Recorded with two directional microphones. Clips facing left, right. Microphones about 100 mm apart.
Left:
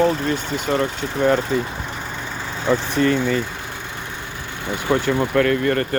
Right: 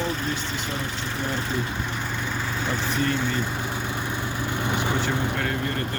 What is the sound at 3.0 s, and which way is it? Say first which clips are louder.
Speech: left 8 dB; 90° left.